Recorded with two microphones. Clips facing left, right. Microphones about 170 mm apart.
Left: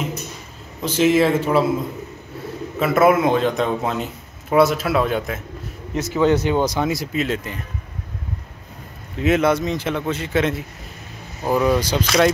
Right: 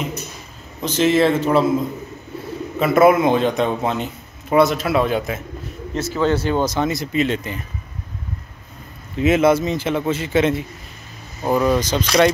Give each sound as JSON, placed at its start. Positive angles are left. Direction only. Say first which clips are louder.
{"t": 0.8, "sound": "speech", "louder": "even", "side_deg": 10}
{"t": 2.8, "sound": "a man's voice", "louder": "right 2 dB", "side_deg": 0}
{"t": 5.9, "sound": "speech", "louder": "left 2 dB", "side_deg": 15}
{"t": 9.2, "sound": "a man's voice", "louder": "right 2 dB", "side_deg": -5}